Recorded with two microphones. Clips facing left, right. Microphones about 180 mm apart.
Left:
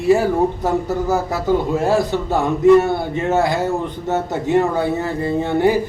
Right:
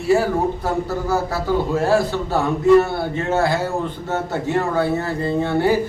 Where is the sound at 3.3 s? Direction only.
20° left (ahead or behind).